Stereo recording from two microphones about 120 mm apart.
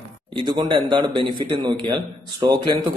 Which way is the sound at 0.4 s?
40° right (ahead or behind).